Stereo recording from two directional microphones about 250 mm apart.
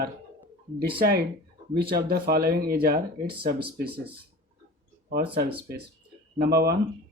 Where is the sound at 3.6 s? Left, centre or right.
Right.